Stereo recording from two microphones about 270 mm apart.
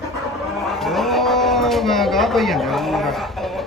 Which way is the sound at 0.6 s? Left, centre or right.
Centre.